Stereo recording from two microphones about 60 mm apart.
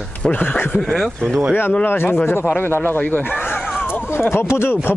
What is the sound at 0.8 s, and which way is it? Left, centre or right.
Speech, centre.